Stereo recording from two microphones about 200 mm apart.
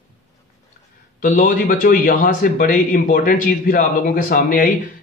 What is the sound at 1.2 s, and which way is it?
A man's voice, 45° left (ahead or behind).